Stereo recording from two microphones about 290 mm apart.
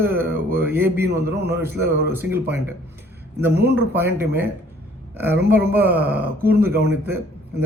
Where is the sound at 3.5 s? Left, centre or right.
Right.